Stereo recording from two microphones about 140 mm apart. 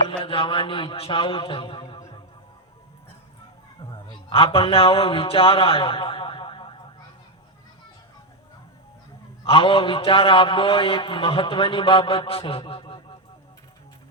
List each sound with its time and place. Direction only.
0.3 s a man's voice: 40° left (ahead or behind)
3.8 s speech: 35° left (ahead or behind)
9.4 s a man's voice: 40° left (ahead or behind)